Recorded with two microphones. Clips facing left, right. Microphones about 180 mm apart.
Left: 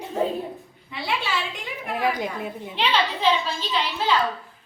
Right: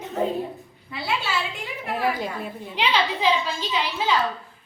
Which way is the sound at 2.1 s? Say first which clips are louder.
Left 1 dB; 20° left (ahead or behind).